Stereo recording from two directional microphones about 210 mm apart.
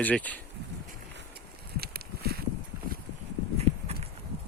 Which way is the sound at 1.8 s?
45° right (ahead or behind).